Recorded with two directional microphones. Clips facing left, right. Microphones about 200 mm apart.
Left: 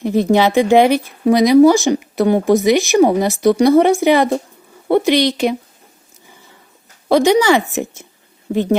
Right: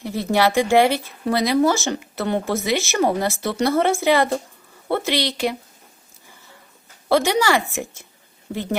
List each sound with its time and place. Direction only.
0.0 s speech: 20° left (ahead or behind)
7.1 s speech: 20° left (ahead or behind)